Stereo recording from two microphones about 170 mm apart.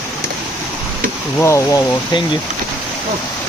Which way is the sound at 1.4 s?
20° left (ahead or behind).